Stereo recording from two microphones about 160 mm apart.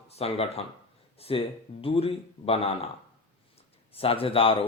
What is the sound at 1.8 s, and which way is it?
Speech, 35° left (ahead or behind).